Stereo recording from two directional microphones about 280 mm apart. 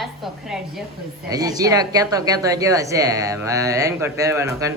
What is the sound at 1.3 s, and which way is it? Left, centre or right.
Speech, centre.